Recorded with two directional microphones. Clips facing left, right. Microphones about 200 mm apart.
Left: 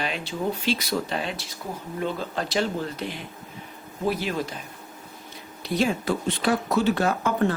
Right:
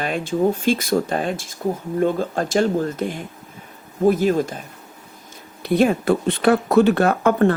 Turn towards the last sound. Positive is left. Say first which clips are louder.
# right 7 dB
turn(degrees=-60)  # may be behind; listen again after turning